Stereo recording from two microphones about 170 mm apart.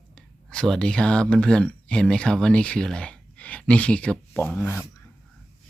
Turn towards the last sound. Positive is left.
turn(degrees=15)  # may be behind; listen again after turning